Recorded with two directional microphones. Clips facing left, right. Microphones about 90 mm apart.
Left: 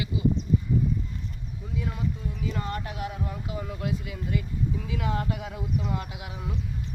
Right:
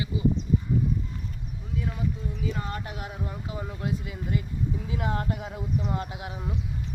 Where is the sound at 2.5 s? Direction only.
25° right (ahead or behind).